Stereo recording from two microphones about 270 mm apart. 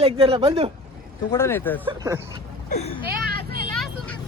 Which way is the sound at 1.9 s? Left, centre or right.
Centre.